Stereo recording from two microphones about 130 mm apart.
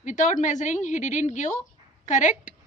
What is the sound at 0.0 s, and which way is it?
A woman's voice, 75° left (ahead or behind).